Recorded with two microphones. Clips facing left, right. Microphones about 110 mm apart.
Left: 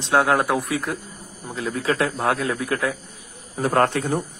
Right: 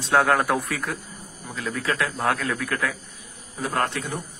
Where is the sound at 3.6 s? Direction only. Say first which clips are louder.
Left 6 dB; 45° left (ahead or behind).